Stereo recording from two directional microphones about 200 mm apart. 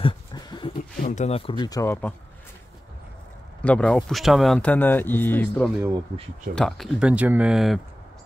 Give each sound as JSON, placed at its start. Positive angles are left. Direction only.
{"t": 0.0, "sound": "a sound", "side_deg": 20}
{"t": 1.0, "sound": "speech", "side_deg": 35}
{"t": 3.6, "sound": "speech", "side_deg": 5}
{"t": 5.9, "sound": "speech", "side_deg": -20}
{"t": 6.5, "sound": "speech", "side_deg": 0}